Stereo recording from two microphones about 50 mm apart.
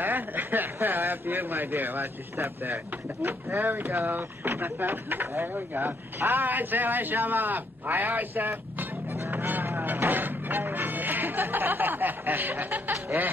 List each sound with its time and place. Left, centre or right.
0.0 s a man's voice: right
9.5 s music: right